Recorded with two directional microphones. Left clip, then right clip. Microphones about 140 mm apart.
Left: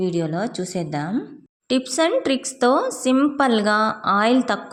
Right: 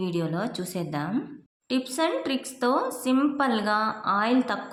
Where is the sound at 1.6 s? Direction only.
55° left (ahead or behind).